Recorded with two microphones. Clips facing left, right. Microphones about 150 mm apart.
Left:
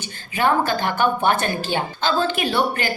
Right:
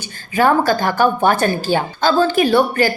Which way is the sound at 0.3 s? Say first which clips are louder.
Right 5 dB; 40° right (ahead or behind).